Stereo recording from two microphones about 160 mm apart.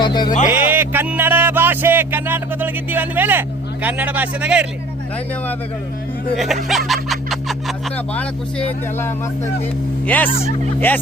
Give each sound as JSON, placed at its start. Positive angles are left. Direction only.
{"t": 0.0, "sound": "speech", "side_deg": 25}
{"t": 0.4, "sound": "speech", "side_deg": -10}
{"t": 6.3, "sound": "speech", "side_deg": 0}
{"t": 10.8, "sound": "speech", "side_deg": 10}